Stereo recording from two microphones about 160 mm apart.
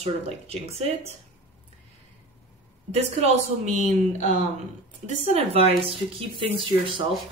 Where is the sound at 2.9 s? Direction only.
45° right (ahead or behind).